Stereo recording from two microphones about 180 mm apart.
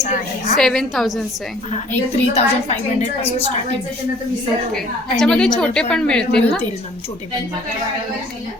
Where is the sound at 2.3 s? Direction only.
35° left (ahead or behind).